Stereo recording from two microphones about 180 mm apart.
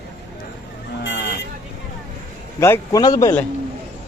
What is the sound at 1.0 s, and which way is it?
Vehicle, 90° left.